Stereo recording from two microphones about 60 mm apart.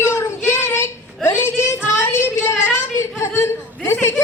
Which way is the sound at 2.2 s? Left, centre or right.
Left.